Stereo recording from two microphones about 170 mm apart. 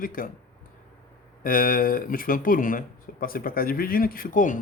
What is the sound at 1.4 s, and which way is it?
Speech, 55° left (ahead or behind).